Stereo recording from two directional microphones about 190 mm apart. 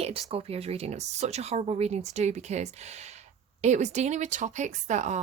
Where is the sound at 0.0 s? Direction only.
30° right (ahead or behind).